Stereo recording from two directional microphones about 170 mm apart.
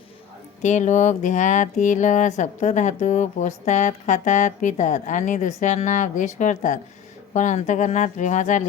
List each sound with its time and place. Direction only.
0.6 s speech: 45° left (ahead or behind)